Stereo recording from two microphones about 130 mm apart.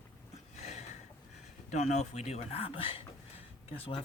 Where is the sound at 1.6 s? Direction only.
60° left (ahead or behind).